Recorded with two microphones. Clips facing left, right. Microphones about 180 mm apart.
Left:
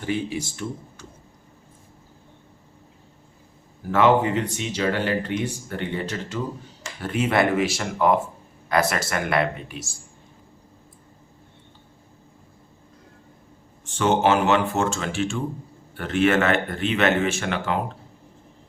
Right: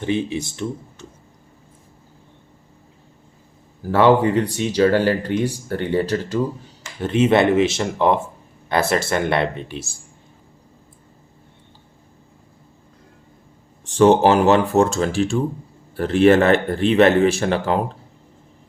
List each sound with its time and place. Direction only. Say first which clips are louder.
0.0 s speech: right 4 dB; 20° right (ahead or behind)
3.9 s speech: right 4 dB; 35° right (ahead or behind)
7.0 s speech: right 6 dB; 25° right (ahead or behind)
13.8 s speech: right 7 dB; 35° right (ahead or behind)